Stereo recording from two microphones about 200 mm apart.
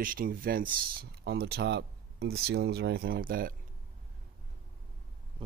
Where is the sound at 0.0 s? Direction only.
45° right (ahead or behind).